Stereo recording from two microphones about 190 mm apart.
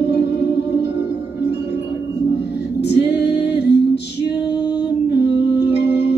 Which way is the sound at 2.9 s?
60° left (ahead or behind).